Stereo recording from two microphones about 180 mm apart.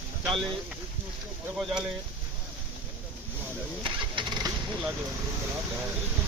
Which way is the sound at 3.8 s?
25° right (ahead or behind).